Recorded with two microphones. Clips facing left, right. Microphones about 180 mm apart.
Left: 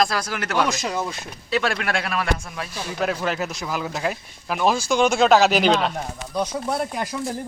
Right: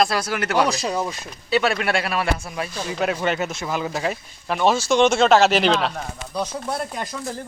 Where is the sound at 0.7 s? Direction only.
35° right (ahead or behind).